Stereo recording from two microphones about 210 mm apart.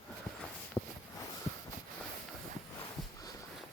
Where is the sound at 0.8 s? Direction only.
20° left (ahead or behind).